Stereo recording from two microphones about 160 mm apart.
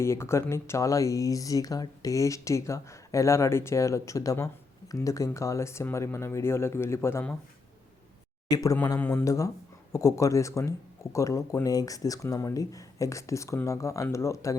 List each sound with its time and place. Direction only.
0.0 s speech: 15° left (ahead or behind)
8.4 s speech: 20° left (ahead or behind)